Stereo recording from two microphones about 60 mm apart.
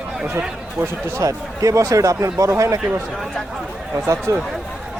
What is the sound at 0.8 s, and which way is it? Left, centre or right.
Speech, right.